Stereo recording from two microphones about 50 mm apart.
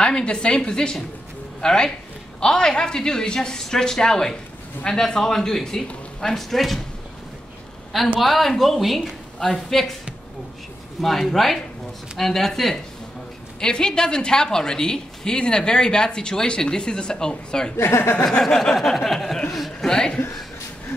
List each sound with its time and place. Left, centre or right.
0.0 s a woman's voice: centre
8.2 s speech: centre
11.0 s speech: centre
13.6 s a woman's voice: centre
17.7 s speech: left
18.4 s a woman's voice: centre
19.9 s a woman's voice: centre